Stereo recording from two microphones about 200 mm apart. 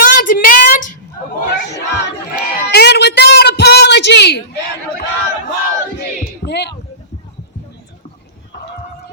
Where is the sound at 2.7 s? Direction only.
55° left (ahead or behind).